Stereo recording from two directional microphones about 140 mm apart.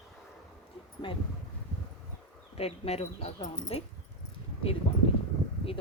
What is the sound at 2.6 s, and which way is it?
Speech, 45° left (ahead or behind).